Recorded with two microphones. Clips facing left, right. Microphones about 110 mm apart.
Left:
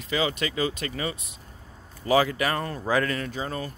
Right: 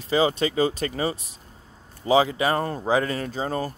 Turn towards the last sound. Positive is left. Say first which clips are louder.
# right 4 dB
turn(degrees=-35)  # may be behind; listen again after turning